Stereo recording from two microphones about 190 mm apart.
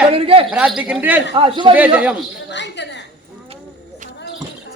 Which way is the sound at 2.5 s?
65° left (ahead or behind).